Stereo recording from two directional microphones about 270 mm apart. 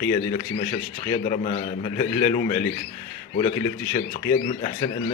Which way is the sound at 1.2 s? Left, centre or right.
Left.